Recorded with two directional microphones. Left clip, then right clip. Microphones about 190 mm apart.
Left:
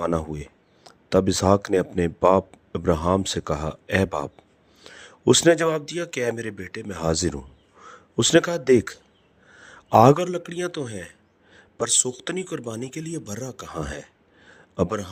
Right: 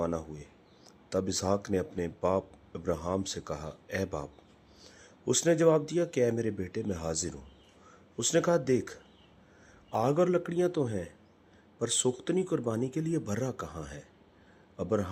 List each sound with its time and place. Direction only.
0.0 s a man's voice: 40° left (ahead or behind)
9.6 s a sound: 45° left (ahead or behind)
10.5 s a man's voice: 50° left (ahead or behind)
12.1 s a man's voice: 45° left (ahead or behind)
13.1 s speech: 5° left (ahead or behind)
13.7 s a man's voice: 45° left (ahead or behind)